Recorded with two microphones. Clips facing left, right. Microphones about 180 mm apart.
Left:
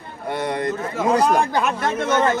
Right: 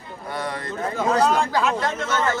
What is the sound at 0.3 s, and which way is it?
Speech, 20° left (ahead or behind).